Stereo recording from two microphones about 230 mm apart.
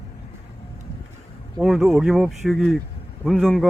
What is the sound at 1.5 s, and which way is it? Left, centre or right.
Speech, centre.